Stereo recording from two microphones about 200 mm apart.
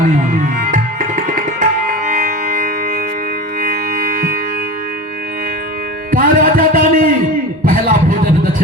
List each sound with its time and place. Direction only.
0.6 s tabla: 40° right (ahead or behind)
2.0 s music: 40° right (ahead or behind)
6.1 s music: 45° right (ahead or behind)
7.6 s a sound: 45° right (ahead or behind)